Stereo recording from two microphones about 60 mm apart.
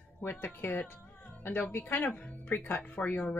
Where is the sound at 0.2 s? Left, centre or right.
Left.